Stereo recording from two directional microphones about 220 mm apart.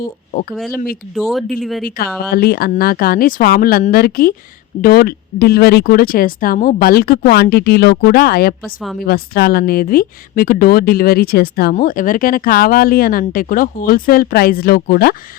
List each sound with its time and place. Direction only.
0.0 s speech: 40° left (ahead or behind)
0.5 s speech: centre (ahead or behind)
2.3 s speech: 45° left (ahead or behind)